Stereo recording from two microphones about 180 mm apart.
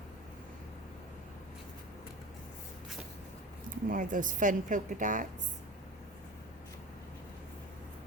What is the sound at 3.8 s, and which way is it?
A woman's voice, 50° right (ahead or behind).